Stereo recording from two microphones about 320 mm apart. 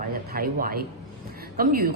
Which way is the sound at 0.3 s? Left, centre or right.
Right.